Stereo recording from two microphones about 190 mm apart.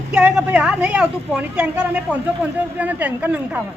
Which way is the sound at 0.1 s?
5° right (ahead or behind).